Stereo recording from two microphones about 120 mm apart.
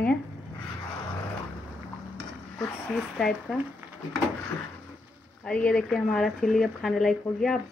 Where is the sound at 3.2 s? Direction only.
5° left (ahead or behind).